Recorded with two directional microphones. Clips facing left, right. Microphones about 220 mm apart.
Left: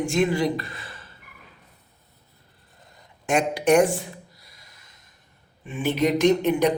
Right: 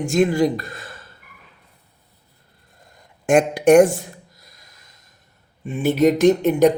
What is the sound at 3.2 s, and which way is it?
Speech, 50° right (ahead or behind).